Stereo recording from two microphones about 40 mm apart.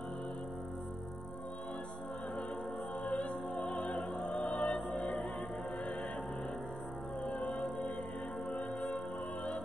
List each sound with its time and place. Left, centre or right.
3.1 s music: left
4.5 s music: left
7.2 s music: left